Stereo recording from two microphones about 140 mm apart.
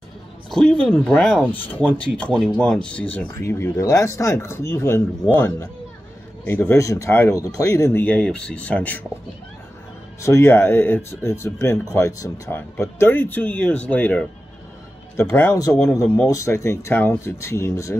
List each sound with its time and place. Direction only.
0.5 s speech: 5° left (ahead or behind)
6.4 s speech: 15° left (ahead or behind)
10.2 s speech: 20° left (ahead or behind)